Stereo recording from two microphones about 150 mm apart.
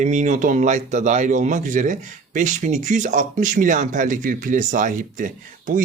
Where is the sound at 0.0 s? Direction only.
55° right (ahead or behind).